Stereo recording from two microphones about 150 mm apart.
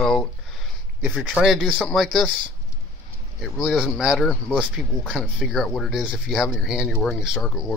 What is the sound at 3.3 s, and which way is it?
Speech, centre (ahead or behind).